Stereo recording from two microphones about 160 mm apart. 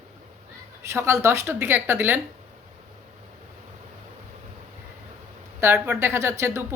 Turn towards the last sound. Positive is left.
turn(degrees=-15)  # may be behind; listen again after turning